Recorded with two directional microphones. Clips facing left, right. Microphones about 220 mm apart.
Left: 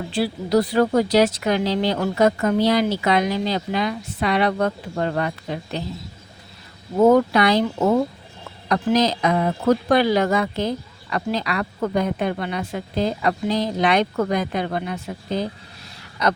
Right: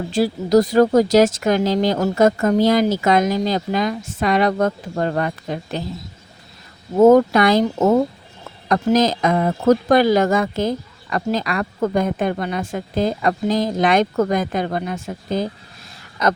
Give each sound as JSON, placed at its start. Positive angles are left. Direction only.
{"t": 0.1, "sound": "speech", "side_deg": -45}
{"t": 7.0, "sound": "speech", "side_deg": -45}